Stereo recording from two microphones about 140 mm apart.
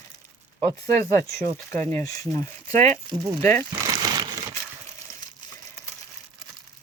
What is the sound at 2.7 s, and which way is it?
Speech, 55° right (ahead or behind).